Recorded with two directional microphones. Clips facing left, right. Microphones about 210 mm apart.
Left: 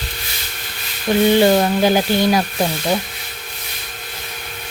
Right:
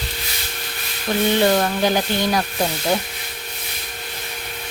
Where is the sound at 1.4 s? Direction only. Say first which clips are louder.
Left 4 dB; 20° left (ahead or behind).